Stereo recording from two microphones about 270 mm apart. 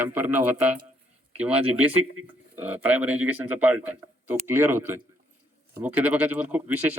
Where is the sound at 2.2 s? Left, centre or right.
Right.